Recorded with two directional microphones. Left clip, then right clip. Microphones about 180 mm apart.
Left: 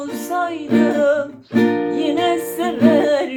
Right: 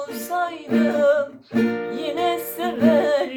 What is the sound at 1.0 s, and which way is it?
Music, 5° left (ahead or behind).